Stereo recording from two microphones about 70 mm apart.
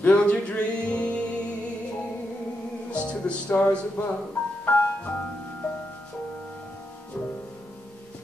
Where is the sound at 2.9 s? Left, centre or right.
Centre.